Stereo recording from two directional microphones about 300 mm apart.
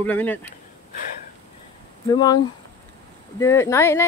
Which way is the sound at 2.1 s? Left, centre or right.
Centre.